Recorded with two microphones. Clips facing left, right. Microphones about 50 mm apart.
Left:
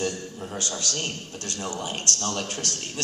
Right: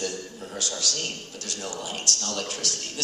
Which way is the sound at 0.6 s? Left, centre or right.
Left.